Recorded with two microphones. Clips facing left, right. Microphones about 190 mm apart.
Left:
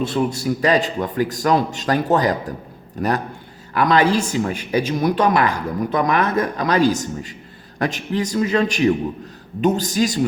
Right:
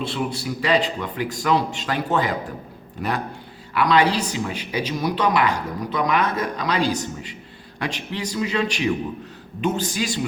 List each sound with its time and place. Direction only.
0.0 s a man's voice: 45° left (ahead or behind)